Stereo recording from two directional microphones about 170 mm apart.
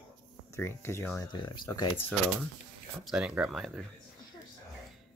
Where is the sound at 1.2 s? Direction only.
25° left (ahead or behind).